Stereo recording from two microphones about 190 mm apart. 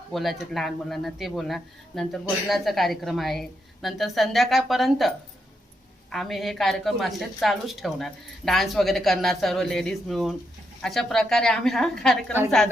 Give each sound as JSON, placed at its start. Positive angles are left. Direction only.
{"t": 0.1, "sound": "speech", "side_deg": 0}